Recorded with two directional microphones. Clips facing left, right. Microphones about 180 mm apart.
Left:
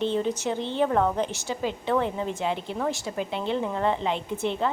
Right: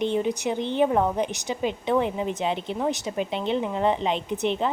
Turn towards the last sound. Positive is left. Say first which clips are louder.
# right 2 dB
turn(degrees=-20)  # may be behind; listen again after turning